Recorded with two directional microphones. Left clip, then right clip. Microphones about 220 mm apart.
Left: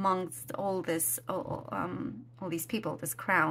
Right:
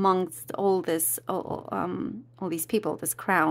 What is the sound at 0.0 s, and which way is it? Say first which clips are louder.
Speech: right 6 dB; 40° right (ahead or behind).